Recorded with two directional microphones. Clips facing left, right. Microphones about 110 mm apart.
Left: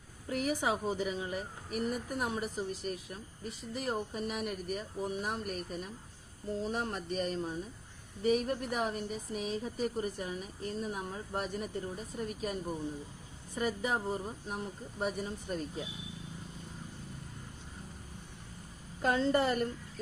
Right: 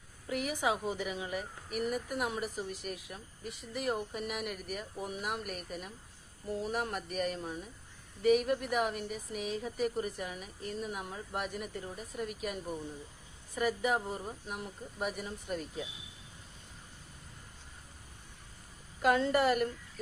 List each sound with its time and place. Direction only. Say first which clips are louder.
0.3 s a sound: left 2 dB; 35° left (ahead or behind)
0.6 s speech: even; 35° left (ahead or behind)
19.0 s speech: right 1 dB; 30° left (ahead or behind)